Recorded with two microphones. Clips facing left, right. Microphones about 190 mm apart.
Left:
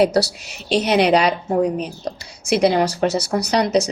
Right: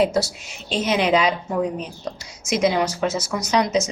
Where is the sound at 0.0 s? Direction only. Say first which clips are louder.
Left 3 dB; 70° left (ahead or behind).